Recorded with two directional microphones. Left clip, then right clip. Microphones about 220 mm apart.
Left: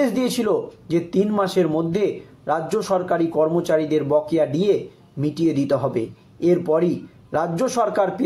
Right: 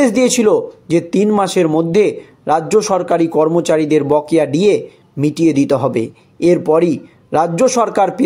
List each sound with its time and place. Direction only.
0.0 s speech: 35° right (ahead or behind)